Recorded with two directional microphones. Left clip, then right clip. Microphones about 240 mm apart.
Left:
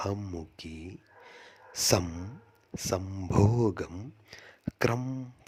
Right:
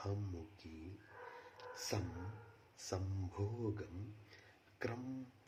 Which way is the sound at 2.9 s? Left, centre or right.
Left.